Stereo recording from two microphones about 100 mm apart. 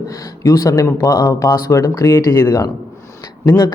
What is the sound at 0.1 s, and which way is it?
Speech, 35° left (ahead or behind).